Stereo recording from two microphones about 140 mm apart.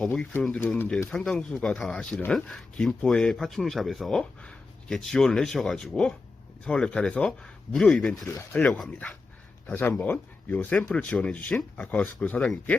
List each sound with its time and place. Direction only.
0.1 s speech: 15° left (ahead or behind)